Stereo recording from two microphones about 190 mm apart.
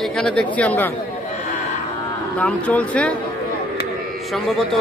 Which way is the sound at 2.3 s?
5° left (ahead or behind).